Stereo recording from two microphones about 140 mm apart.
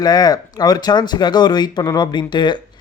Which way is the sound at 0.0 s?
30° left (ahead or behind).